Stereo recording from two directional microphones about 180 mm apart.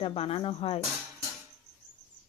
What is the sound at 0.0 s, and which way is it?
Speech, 30° left (ahead or behind).